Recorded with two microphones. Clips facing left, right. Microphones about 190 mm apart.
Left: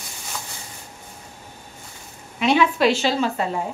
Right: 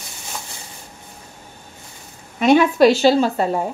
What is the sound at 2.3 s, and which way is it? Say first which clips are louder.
A woman's voice: right 5 dB; 45° right (ahead or behind).